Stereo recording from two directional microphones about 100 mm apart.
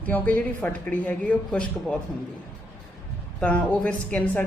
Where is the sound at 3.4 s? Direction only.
15° left (ahead or behind).